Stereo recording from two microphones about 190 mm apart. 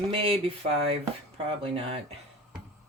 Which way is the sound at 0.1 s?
30° right (ahead or behind).